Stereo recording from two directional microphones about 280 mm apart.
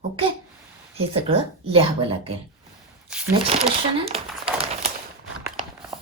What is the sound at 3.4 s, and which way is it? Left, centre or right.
Crumpling, right.